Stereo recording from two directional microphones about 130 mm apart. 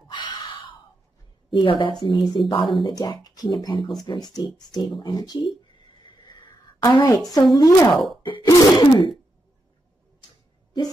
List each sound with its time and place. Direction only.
0.1 s a sound: 35° left (ahead or behind)
1.5 s speech: 35° left (ahead or behind)
6.0 s a sound: 35° left (ahead or behind)
7.5 s throat clearing: 25° left (ahead or behind)
7.9 s speech: centre (ahead or behind)
8.5 s throat clearing: 25° left (ahead or behind)